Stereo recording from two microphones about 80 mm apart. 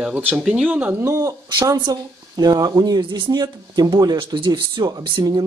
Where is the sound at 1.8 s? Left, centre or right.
Right.